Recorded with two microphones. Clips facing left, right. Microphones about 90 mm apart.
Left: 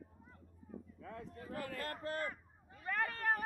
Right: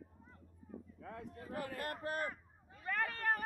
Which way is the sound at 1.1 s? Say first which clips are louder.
Right 1 dB; 15° right (ahead or behind).